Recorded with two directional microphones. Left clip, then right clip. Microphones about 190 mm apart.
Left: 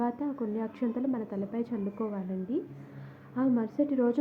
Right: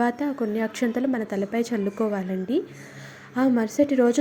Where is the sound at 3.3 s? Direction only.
25° right (ahead or behind).